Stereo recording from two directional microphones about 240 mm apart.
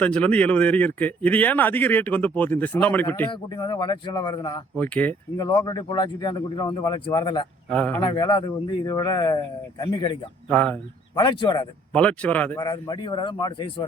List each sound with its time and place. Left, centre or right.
0.0 s speech: centre
4.8 s speech: centre
5.5 s speech: centre
7.7 s speech: centre
8.0 s speech: centre
10.5 s speech: centre
11.1 s speech: centre
11.9 s speech: centre
12.5 s speech: centre